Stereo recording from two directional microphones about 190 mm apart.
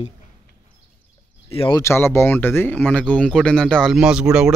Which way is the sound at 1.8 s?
15° left (ahead or behind).